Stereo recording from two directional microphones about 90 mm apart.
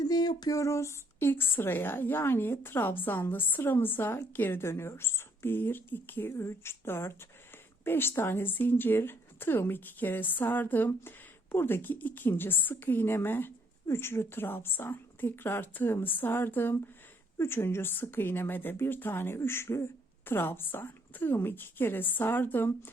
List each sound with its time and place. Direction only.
0.0 s speech: 45° left (ahead or behind); by 22.9 s 20° left (ahead or behind)